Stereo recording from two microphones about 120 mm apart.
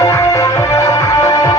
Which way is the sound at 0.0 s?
25° left (ahead or behind).